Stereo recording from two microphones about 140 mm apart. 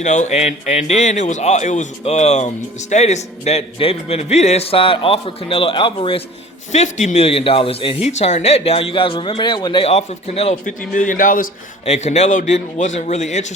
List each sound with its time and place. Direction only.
0.0 s a man's voice: 55° left (ahead or behind); by 6.2 s 40° left (ahead or behind)
6.7 s a man's voice: 60° left (ahead or behind); by 7.9 s 40° left (ahead or behind)
8.0 s speech: 50° left (ahead or behind); by 9.8 s 30° left (ahead or behind)
9.8 s a man's voice: 50° left (ahead or behind)
10.7 s a man's voice: 65° left (ahead or behind)
11.9 s speech: 55° left (ahead or behind)